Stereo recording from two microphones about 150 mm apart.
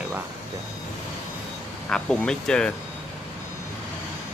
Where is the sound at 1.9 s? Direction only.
5° left (ahead or behind).